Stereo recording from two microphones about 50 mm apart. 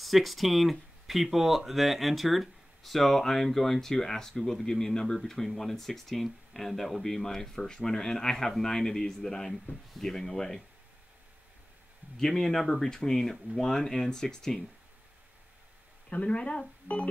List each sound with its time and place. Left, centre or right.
0.0 s speech: centre
12.2 s speech: centre
16.1 s speech: left